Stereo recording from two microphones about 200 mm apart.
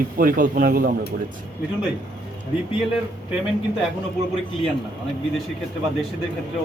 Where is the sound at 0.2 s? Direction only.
45° right (ahead or behind).